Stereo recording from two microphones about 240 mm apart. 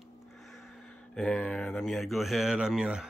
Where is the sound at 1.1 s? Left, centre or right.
Centre.